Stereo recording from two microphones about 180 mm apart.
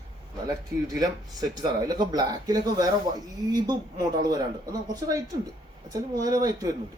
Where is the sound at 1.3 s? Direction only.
20° right (ahead or behind).